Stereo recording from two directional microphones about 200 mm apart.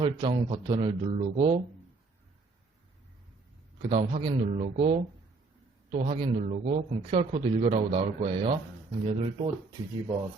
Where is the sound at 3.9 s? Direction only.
35° right (ahead or behind).